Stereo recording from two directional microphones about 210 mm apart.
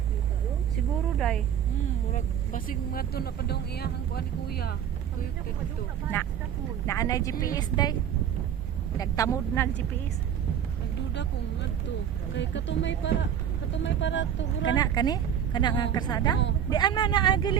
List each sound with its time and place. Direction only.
2.1 s speech: 40° left (ahead or behind)
6.1 s a woman's voice: 10° left (ahead or behind)
9.0 s a woman's voice: 15° left (ahead or behind)
12.3 s speech: 60° left (ahead or behind)
14.8 s speech: 20° left (ahead or behind)